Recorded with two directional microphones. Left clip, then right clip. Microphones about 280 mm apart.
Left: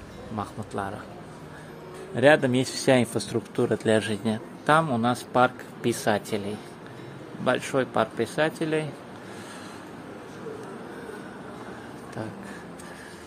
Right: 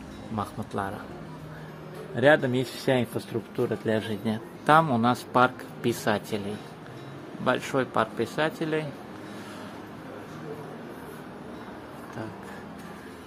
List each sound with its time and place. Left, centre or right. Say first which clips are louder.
0.4 s speech: even; centre
2.1 s speech: left 2 dB; centre
7.4 s speech: left 1 dB; centre